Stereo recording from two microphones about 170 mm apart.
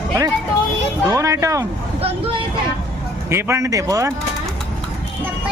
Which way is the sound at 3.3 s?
15° right (ahead or behind).